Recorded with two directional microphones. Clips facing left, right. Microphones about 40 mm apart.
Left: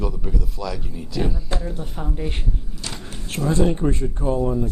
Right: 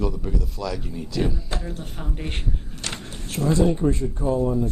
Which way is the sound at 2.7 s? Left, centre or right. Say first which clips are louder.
Right 1 dB; right.